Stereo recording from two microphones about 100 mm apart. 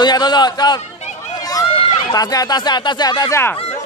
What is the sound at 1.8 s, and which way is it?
Run, 70° left (ahead or behind).